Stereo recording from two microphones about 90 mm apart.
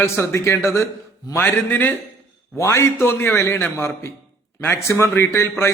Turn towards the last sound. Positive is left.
turn(degrees=30)  # may be behind; listen again after turning